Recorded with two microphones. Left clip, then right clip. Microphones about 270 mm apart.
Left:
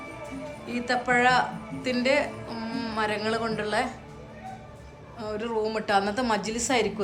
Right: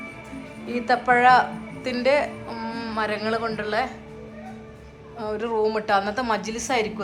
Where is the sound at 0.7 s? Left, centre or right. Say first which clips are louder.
Right 5 dB; centre.